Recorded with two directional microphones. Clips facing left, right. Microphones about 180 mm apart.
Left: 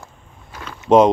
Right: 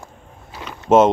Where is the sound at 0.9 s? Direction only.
5° right (ahead or behind).